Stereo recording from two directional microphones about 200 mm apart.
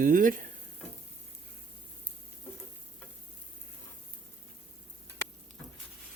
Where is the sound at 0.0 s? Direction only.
40° right (ahead or behind).